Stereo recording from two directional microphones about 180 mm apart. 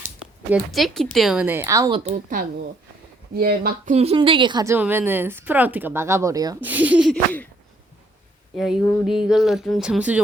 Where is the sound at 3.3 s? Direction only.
55° right (ahead or behind).